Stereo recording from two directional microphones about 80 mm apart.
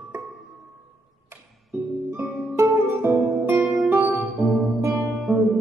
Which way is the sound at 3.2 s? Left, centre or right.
Centre.